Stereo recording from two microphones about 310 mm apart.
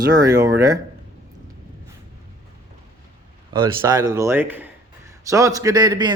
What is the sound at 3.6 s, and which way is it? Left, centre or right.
Speech, centre.